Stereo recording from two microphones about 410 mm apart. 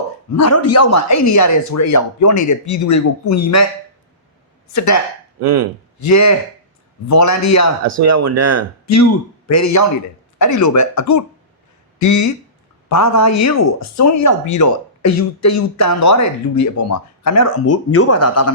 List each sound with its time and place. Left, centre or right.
0.3 s speech: left
4.7 s speech: left
5.4 s speech: right
6.0 s speech: left
7.9 s speech: right
8.9 s speech: left